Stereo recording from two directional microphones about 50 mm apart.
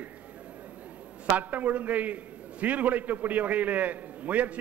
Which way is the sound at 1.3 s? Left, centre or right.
Right.